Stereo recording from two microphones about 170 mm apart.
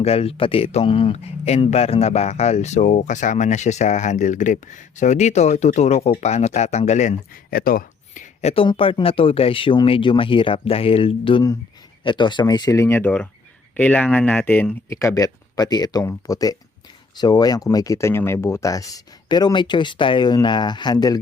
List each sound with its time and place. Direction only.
0.0 s speech: 35° left (ahead or behind)
7.5 s speech: 60° left (ahead or behind); by 21.2 s 25° left (ahead or behind)